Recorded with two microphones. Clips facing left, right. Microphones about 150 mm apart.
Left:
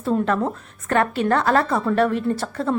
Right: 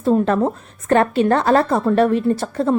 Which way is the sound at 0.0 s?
25° right (ahead or behind).